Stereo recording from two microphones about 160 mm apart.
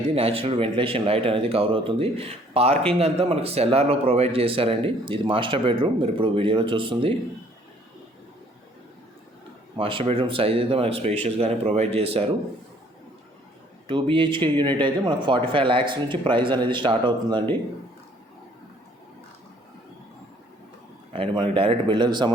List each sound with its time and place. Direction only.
0.1 s speech: 35° right (ahead or behind)
9.7 s speech: 35° right (ahead or behind)
13.8 s speech: 35° right (ahead or behind)
21.1 s a man's voice: 35° right (ahead or behind)